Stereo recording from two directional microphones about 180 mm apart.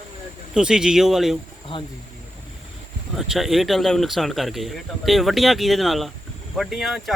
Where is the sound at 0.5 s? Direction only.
5° right (ahead or behind).